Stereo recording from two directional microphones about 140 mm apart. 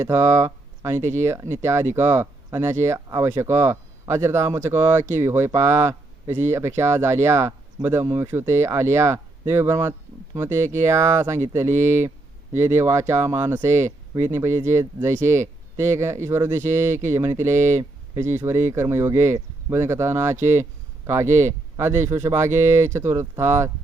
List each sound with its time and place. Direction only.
0.0 s speech: 20° right (ahead or behind)